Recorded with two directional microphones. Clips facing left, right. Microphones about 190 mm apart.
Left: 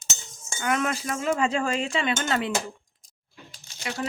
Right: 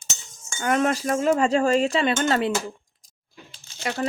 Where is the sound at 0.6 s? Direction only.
40° right (ahead or behind).